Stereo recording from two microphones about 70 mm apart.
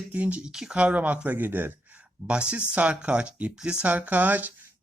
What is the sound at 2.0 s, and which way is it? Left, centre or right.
Speech, centre.